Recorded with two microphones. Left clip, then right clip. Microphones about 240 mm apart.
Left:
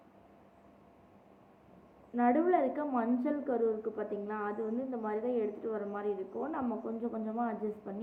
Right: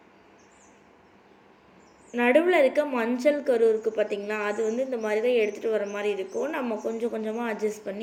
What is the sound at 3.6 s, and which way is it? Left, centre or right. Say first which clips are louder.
Speech: right 11 dB; right.